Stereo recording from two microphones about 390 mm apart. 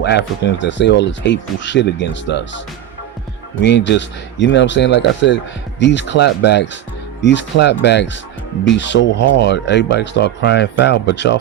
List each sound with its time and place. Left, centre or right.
0.0 s speech: left
3.6 s speech: left